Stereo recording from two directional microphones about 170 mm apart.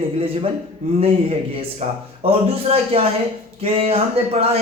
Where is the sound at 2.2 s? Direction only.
35° right (ahead or behind).